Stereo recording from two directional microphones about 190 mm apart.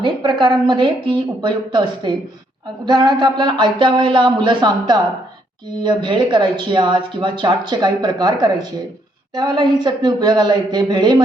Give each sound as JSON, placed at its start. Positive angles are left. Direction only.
{"t": 0.0, "sound": "speech", "side_deg": -25}